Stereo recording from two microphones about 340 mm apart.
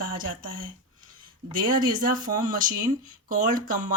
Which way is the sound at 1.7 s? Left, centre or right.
Centre.